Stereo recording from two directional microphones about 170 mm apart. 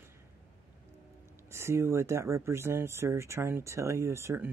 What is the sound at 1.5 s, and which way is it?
Speech, 15° right (ahead or behind).